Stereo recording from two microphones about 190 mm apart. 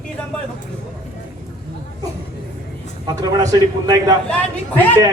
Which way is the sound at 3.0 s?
20° right (ahead or behind).